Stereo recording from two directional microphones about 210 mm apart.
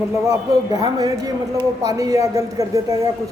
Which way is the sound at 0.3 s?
20° right (ahead or behind).